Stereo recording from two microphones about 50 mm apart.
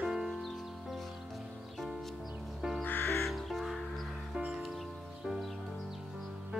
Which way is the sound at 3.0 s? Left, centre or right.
Left.